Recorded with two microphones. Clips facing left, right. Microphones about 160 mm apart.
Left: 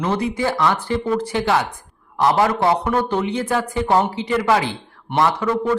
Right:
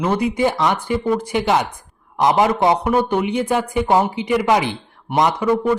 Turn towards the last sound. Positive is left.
turn(degrees=-15)  # may be behind; listen again after turning